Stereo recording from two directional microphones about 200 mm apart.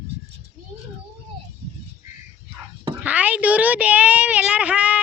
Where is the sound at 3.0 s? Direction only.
5° right (ahead or behind).